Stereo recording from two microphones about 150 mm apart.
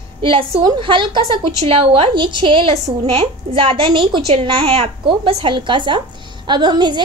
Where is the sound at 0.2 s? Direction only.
35° right (ahead or behind).